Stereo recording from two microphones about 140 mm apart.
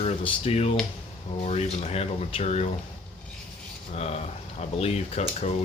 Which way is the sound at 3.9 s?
50° left (ahead or behind).